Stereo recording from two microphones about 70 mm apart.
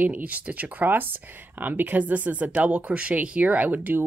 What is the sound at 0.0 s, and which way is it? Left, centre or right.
Speech, right.